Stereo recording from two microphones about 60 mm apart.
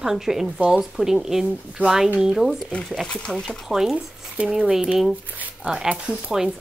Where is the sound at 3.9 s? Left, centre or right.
Right.